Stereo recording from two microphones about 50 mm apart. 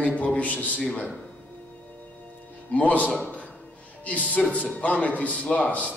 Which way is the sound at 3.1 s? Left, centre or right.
Left.